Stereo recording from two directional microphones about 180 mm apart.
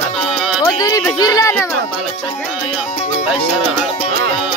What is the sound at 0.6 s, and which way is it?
Speech, 20° left (ahead or behind).